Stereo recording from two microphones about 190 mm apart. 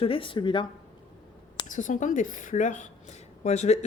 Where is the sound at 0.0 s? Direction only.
30° left (ahead or behind).